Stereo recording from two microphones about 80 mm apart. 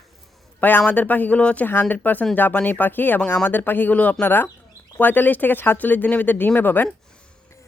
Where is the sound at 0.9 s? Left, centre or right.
Left.